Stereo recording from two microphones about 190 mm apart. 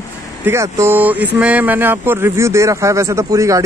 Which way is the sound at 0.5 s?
15° right (ahead or behind).